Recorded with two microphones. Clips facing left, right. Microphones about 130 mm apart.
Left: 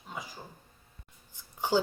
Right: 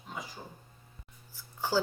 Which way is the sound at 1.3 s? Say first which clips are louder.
Left 4 dB; 20° left (ahead or behind).